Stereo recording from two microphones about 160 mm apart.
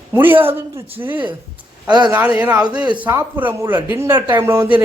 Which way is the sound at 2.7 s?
30° right (ahead or behind).